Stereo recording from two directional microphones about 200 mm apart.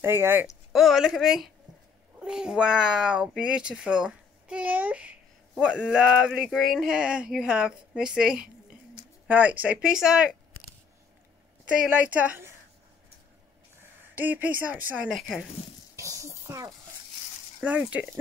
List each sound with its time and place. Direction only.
0.0 s a woman's voice: 15° right (ahead or behind)
0.7 s speech: centre (ahead or behind)
11.7 s a woman's voice: 5° right (ahead or behind)
14.1 s a woman's voice: 10° right (ahead or behind)
16.0 s a sound: 15° right (ahead or behind)
17.6 s speech: 5° right (ahead or behind)